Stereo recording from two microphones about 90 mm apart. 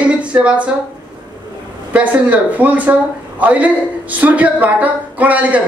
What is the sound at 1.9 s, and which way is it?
Speech, 15° right (ahead or behind).